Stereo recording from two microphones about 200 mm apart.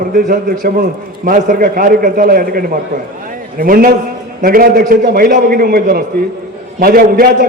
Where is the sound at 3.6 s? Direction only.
45° right (ahead or behind).